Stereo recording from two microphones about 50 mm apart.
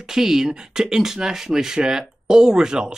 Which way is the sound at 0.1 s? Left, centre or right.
Centre.